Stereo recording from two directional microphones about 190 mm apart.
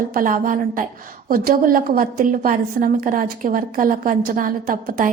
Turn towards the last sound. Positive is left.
turn(degrees=-45)  # may be behind; listen again after turning